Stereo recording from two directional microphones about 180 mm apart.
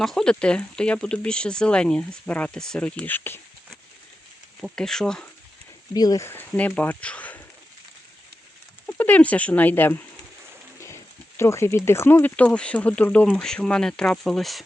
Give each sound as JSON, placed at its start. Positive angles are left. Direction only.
{"t": 0.0, "sound": "speech", "side_deg": 5}
{"t": 5.9, "sound": "speech", "side_deg": 20}
{"t": 8.9, "sound": "speech", "side_deg": 10}
{"t": 10.8, "sound": "a sound", "side_deg": 15}
{"t": 11.9, "sound": "speech", "side_deg": 15}